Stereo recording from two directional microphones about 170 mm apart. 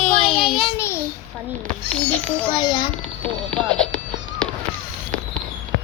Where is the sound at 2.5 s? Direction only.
25° left (ahead or behind).